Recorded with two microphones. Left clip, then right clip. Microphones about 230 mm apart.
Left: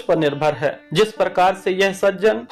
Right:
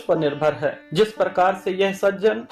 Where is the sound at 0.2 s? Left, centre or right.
Centre.